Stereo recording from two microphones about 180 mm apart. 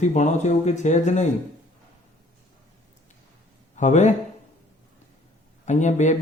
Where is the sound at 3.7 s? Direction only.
40° left (ahead or behind).